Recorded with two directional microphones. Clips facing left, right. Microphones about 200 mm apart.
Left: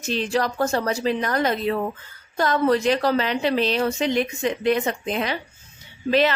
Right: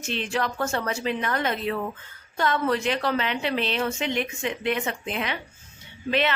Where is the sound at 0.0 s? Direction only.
40° left (ahead or behind).